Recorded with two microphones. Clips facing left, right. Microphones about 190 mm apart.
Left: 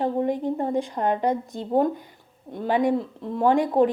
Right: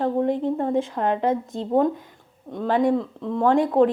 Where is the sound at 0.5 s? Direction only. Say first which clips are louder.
Right 2 dB; centre (ahead or behind).